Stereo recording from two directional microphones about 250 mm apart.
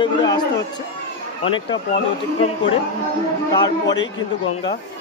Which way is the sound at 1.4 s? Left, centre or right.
Centre.